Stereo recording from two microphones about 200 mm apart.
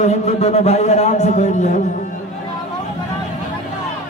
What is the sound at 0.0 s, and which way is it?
A man's voice, 35° left (ahead or behind).